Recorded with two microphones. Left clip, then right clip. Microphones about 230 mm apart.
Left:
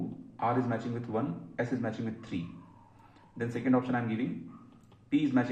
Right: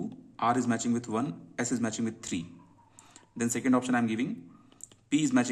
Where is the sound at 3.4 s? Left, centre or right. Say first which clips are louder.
Right 2 dB; right.